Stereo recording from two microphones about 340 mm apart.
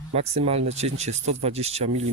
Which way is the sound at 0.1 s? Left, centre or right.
Centre.